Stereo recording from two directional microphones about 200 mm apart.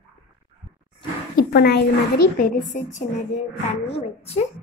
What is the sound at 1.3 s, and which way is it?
A child's voice, 55° left (ahead or behind).